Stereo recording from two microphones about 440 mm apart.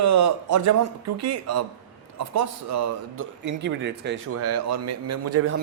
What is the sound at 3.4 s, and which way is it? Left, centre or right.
A man's voice, right.